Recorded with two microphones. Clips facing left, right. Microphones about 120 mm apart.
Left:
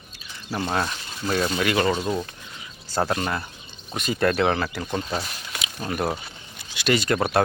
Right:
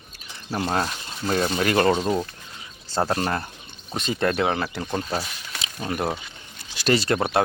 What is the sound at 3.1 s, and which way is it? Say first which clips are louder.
Speech: right 1 dB; 40° right (ahead or behind).